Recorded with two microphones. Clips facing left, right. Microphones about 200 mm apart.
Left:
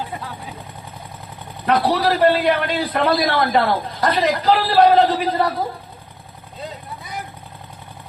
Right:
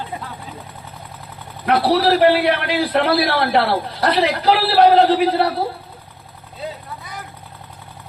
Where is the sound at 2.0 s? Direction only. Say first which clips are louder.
Right 2 dB; 70° right (ahead or behind).